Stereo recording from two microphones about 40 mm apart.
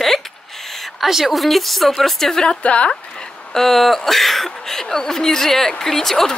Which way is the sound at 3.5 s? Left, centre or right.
Centre.